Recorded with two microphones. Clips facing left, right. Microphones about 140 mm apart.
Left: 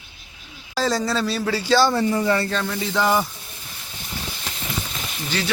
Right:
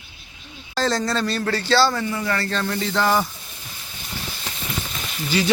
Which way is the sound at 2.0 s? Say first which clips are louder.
Left 5 dB; 35° left (ahead or behind).